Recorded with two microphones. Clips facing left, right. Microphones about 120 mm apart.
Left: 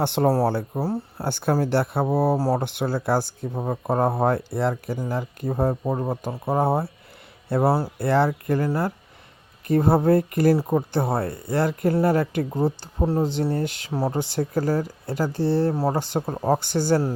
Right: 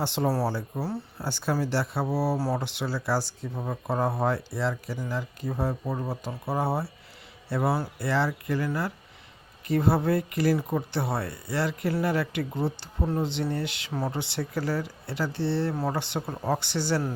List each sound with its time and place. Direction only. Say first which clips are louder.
0.0 s speech: left 6 dB; 55° left (ahead or behind)
7.6 s speech: left 6 dB; 35° left (ahead or behind)
7.9 s speech: left 6 dB; 55° left (ahead or behind)